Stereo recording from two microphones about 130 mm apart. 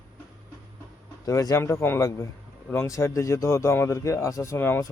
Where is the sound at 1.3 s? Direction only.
25° left (ahead or behind).